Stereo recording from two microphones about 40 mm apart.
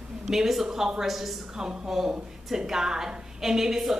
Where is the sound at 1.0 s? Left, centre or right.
Centre.